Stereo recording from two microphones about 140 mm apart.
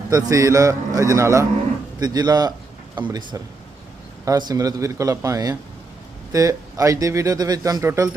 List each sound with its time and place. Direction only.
0.1 s speech: 25° right (ahead or behind)